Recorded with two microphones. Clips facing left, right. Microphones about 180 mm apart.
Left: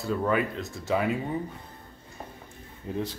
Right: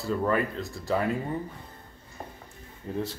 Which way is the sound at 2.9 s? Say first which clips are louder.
Even; 15° left (ahead or behind).